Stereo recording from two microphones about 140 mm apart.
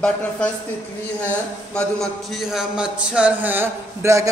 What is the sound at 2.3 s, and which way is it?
A man's voice, 5° right (ahead or behind).